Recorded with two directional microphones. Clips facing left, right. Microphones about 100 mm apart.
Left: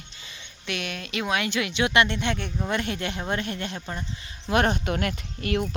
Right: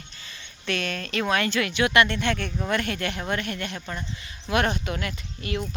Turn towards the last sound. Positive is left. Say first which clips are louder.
# left 4 dB
turn(degrees=55)  # may be behind; listen again after turning